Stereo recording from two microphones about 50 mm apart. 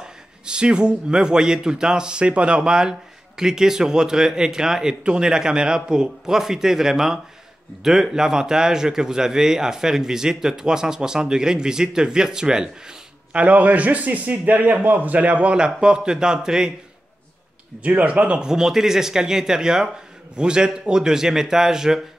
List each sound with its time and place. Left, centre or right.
0.0 s a man's voice: centre
13.3 s a man's voice: right
15.5 s a man's voice: centre
17.8 s a man's voice: right; by 22.0 s centre